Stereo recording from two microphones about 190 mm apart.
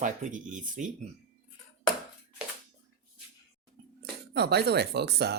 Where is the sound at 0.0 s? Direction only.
45° right (ahead or behind).